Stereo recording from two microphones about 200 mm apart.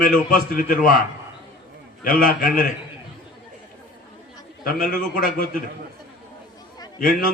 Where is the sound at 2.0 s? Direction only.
45° left (ahead or behind).